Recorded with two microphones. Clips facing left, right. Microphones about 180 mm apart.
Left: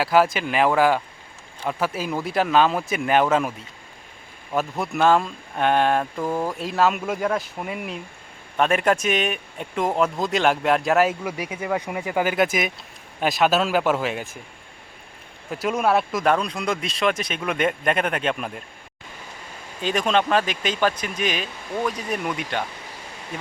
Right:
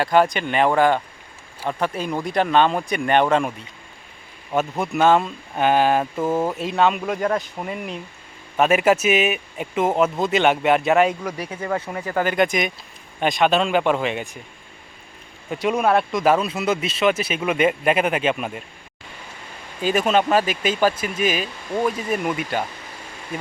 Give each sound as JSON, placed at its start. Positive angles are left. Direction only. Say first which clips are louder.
{"t": 0.0, "sound": "speech", "louder": "right 1 dB", "side_deg": 5}
{"t": 4.8, "sound": "speech", "louder": "right 2 dB", "side_deg": 0}
{"t": 6.2, "sound": "speech", "louder": "right 6 dB", "side_deg": -25}
{"t": 6.5, "sound": "speech", "louder": "right 2 dB", "side_deg": 0}
{"t": 15.4, "sound": "speech", "louder": "right 2 dB", "side_deg": 0}
{"t": 19.8, "sound": "speech", "louder": "right 3 dB", "side_deg": -5}